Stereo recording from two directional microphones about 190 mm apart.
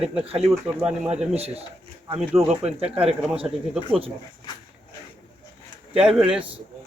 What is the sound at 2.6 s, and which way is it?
Speech, 35° right (ahead or behind).